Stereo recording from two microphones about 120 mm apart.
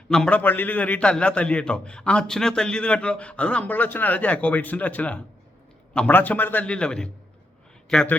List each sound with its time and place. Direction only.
0.1 s a man's voice: 10° left (ahead or behind)